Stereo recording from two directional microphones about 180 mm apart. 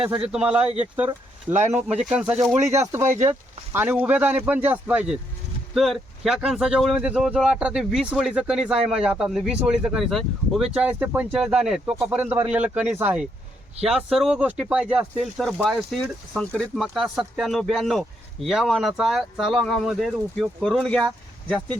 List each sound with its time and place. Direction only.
0.0 s speech: 5° right (ahead or behind)
2.8 s speech: 15° right (ahead or behind); by 21.8 s 5° left (ahead or behind)